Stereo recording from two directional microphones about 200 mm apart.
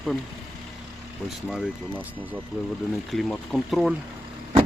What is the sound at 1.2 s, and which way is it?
Speech, centre (ahead or behind).